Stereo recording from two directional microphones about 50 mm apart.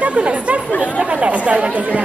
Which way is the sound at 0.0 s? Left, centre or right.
Right.